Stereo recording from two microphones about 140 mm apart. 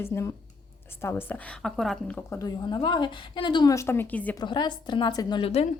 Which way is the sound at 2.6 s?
30° left (ahead or behind).